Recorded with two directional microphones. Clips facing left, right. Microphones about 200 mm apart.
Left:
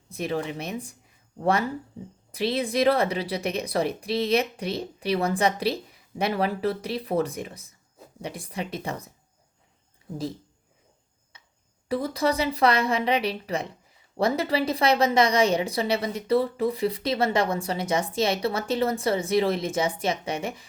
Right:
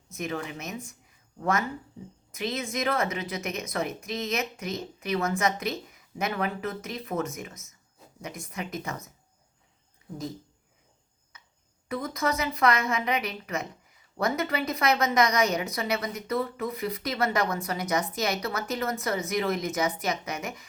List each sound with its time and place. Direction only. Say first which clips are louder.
0.1 s a woman's voice: left 5 dB; 35° left (ahead or behind)
11.3 s a sound: even; 30° left (ahead or behind)
11.9 s a woman's voice: left 4 dB; 30° left (ahead or behind)